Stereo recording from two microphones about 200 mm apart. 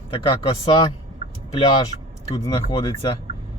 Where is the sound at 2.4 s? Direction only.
25° left (ahead or behind).